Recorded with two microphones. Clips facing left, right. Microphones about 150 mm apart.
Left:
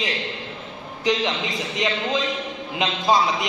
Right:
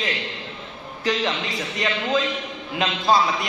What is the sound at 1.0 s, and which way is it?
A man's voice, 20° left (ahead or behind).